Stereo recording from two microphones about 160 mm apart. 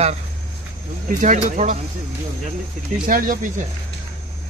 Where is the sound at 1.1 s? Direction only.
55° right (ahead or behind).